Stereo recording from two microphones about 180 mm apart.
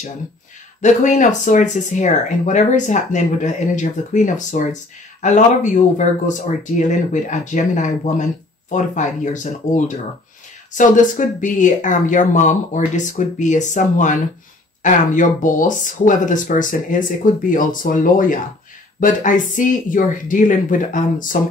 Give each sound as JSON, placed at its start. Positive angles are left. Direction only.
{"t": 0.8, "sound": "speech", "side_deg": 45}